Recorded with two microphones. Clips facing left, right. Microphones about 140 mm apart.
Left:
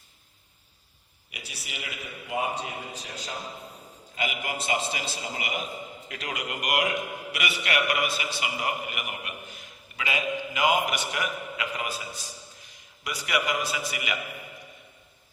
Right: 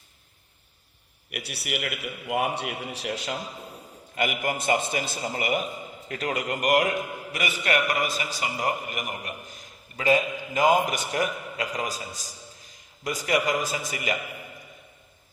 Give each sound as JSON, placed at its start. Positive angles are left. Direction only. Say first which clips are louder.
{"t": 1.3, "sound": "a man's voice", "louder": "right 10 dB", "side_deg": -70}
{"t": 4.1, "sound": "a man's voice", "louder": "right 5 dB", "side_deg": -50}